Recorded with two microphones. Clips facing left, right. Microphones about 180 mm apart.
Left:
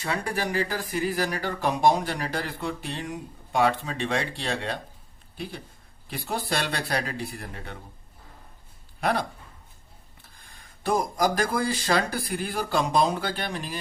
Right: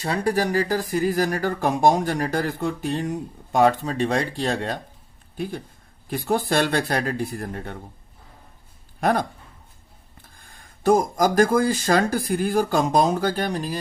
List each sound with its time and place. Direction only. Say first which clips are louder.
0.0 s speech: right 6 dB; 35° right (ahead or behind)
9.0 s speech: right 5 dB; 45° right (ahead or behind)
10.6 s speech: right 7 dB; 45° right (ahead or behind)